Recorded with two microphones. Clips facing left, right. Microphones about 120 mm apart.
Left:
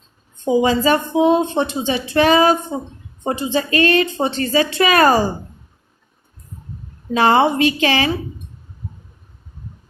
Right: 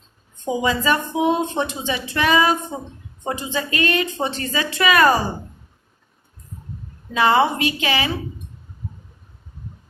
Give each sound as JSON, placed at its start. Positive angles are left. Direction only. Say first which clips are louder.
{"t": 0.4, "sound": "a woman's voice", "louder": "left 5 dB", "side_deg": 35}
{"t": 7.1, "sound": "a woman's voice", "louder": "left 3 dB", "side_deg": 35}